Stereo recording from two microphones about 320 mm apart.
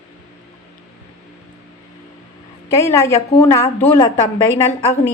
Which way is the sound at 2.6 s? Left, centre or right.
Centre.